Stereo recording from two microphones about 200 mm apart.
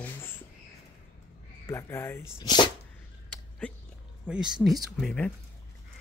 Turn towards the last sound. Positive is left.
turn(degrees=5)  # may be behind; listen again after turning